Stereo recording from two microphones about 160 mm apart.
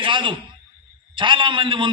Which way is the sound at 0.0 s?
30° right (ahead or behind).